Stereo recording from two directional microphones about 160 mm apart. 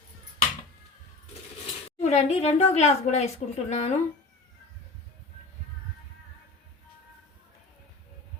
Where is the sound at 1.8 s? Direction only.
40° left (ahead or behind).